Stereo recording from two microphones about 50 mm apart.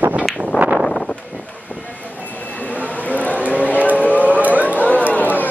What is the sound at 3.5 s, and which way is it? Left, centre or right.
Music, left.